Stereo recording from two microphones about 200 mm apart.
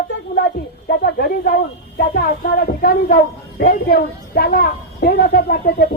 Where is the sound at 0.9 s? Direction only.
50° left (ahead or behind).